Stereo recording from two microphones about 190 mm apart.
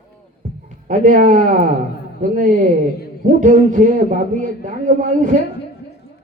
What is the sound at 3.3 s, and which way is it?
Speech, 40° right (ahead or behind).